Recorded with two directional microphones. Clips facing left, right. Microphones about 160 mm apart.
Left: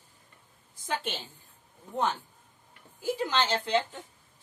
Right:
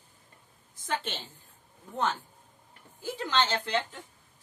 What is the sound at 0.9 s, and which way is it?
Speech, 10° left (ahead or behind).